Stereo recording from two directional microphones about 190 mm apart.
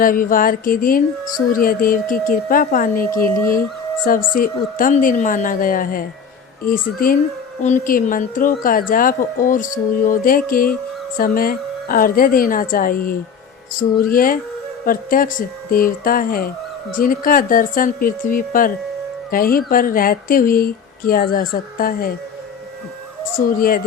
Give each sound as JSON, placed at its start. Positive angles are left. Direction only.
{"t": 0.0, "sound": "speech", "side_deg": 45}
{"t": 23.6, "sound": "speech", "side_deg": 50}